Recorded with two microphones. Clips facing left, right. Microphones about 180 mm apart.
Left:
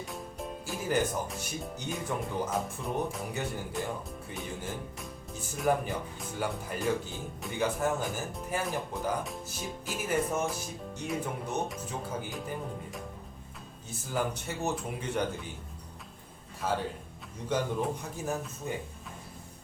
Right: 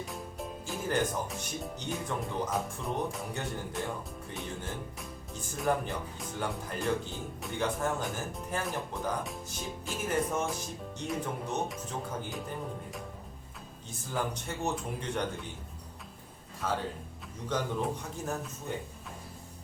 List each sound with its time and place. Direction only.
0.0 s music: centre (ahead or behind)
1.9 s speech: 5° left (ahead or behind)
14.1 s speech: 5° left (ahead or behind)
17.5 s speech: 5° left (ahead or behind)